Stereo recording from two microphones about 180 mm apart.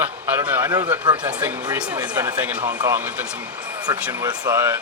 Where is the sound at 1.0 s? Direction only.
25° right (ahead or behind).